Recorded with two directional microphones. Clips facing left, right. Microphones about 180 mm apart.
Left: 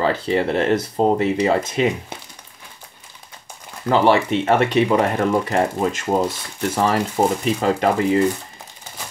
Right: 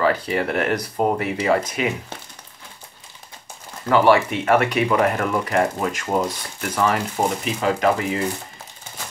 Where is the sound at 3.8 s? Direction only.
25° left (ahead or behind).